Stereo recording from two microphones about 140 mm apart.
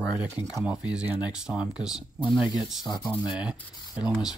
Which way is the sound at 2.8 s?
30° left (ahead or behind).